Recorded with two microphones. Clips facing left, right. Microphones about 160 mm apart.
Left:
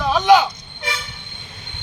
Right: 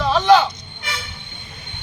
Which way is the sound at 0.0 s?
15° left (ahead or behind).